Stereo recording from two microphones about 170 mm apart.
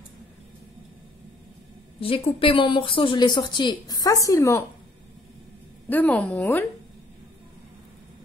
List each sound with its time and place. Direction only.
2.0 s speech: 35° left (ahead or behind); by 4.6 s 15° left (ahead or behind)
5.9 s speech: 10° left (ahead or behind)